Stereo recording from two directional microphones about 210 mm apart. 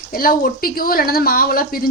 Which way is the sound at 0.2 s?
45° left (ahead or behind).